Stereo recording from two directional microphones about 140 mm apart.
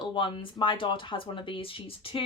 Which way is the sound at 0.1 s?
35° left (ahead or behind).